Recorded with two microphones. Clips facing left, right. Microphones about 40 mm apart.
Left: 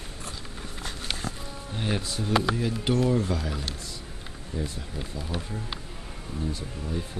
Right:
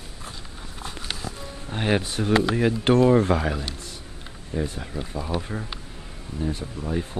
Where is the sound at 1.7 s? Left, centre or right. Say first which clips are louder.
Right 7 dB; right.